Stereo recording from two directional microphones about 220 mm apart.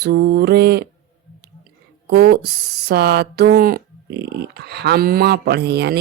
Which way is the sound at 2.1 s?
45° right (ahead or behind).